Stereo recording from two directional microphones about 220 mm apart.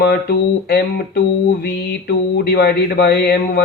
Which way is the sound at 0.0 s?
45° left (ahead or behind).